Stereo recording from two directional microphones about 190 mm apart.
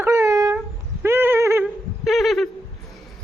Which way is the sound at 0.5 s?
10° right (ahead or behind).